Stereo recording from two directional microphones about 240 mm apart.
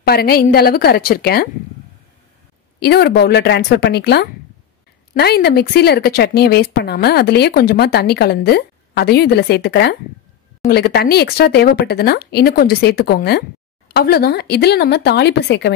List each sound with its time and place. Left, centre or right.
0.0 s a woman's voice: left
2.8 s a woman's voice: left